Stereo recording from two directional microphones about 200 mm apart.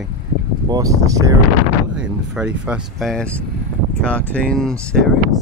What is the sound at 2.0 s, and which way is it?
Speech, 5° right (ahead or behind).